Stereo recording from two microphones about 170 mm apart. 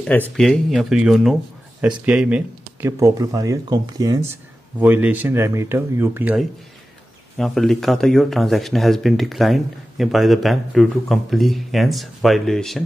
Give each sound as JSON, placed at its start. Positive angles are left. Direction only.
{"t": 0.0, "sound": "speech", "side_deg": 5}
{"t": 4.7, "sound": "speech", "side_deg": -10}
{"t": 7.3, "sound": "speech", "side_deg": 0}